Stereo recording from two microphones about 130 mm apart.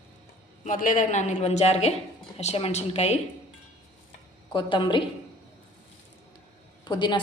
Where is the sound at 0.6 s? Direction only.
90° left; by 3.1 s 55° left (ahead or behind).